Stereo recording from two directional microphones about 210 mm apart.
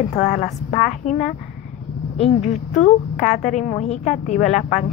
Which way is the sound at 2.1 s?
30° left (ahead or behind).